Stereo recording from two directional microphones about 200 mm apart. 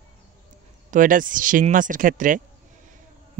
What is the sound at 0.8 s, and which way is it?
A man's voice, 40° right (ahead or behind).